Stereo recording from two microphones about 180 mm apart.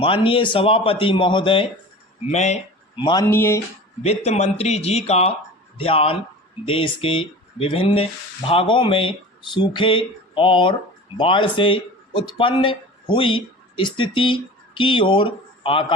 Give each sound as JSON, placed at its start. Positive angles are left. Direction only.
{"t": 0.0, "sound": "speech", "side_deg": 30}
{"t": 2.2, "sound": "speech", "side_deg": 40}
{"t": 2.9, "sound": "speech", "side_deg": 25}
{"t": 3.2, "sound": "speech", "side_deg": 15}
{"t": 4.0, "sound": "speech", "side_deg": 35}